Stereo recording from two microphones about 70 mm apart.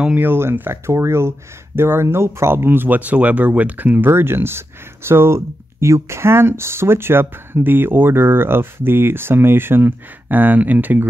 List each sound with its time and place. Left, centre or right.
0.2 s speech: right